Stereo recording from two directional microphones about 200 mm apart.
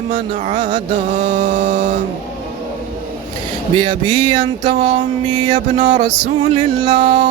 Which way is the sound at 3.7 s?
25° right (ahead or behind).